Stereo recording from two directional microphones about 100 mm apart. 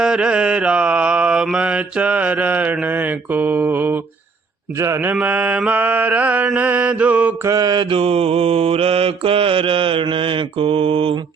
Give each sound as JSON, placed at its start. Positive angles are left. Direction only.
{"t": 0.0, "sound": "mantra", "side_deg": -5}
{"t": 7.4, "sound": "mantra", "side_deg": -40}